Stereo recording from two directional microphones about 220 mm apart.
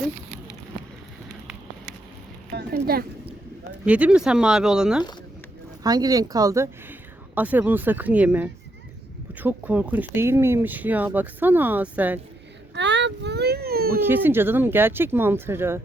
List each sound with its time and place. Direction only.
2.5 s a sound: 45° right (ahead or behind)
3.8 s speech: 5° right (ahead or behind)
5.8 s speech: 15° right (ahead or behind)
12.7 s baby cry: 50° right (ahead or behind)
14.0 s speech: 10° right (ahead or behind)